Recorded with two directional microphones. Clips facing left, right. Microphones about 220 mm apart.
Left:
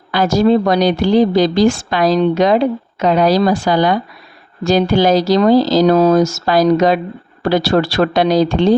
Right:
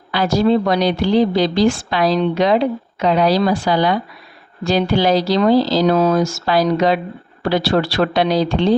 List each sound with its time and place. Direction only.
0.1 s a woman's voice: 45° left (ahead or behind)